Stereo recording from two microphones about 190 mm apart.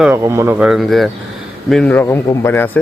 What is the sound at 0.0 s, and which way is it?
A man's voice, 15° right (ahead or behind).